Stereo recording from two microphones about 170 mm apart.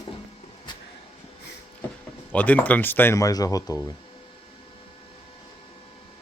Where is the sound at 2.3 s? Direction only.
10° left (ahead or behind).